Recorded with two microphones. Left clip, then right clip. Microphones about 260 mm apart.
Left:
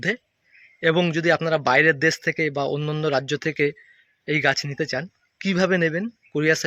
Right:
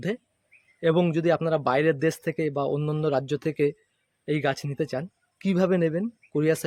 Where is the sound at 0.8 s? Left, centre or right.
Centre.